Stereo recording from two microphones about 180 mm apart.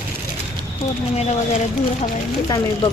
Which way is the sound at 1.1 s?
35° left (ahead or behind).